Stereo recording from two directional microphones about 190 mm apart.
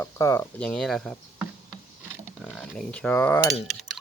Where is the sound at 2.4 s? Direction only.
Centre (ahead or behind).